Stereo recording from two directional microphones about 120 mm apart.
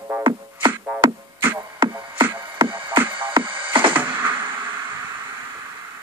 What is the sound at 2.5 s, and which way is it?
Music, 45° right (ahead or behind).